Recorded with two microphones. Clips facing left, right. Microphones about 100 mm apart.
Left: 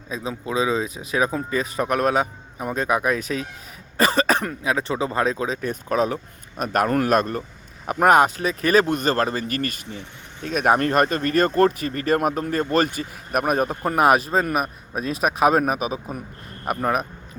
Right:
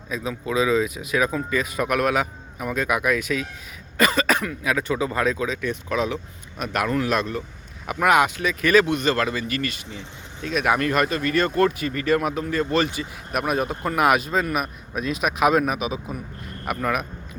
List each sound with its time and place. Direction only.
0.1 s speech: 30° left (ahead or behind)